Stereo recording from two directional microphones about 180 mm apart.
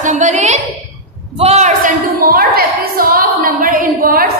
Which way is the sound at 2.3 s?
55° right (ahead or behind).